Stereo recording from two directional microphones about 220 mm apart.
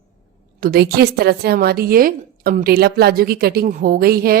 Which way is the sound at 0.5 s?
45° right (ahead or behind).